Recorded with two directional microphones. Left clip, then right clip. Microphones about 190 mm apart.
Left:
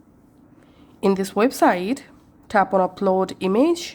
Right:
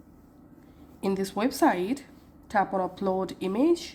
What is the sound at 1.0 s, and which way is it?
A woman's voice, 35° left (ahead or behind).